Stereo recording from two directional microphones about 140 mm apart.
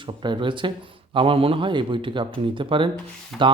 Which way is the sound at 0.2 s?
35° right (ahead or behind).